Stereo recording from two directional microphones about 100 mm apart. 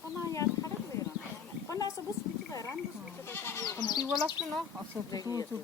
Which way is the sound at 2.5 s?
35° left (ahead or behind).